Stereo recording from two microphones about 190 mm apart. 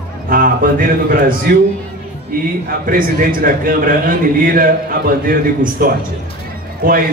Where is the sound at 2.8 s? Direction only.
45° right (ahead or behind).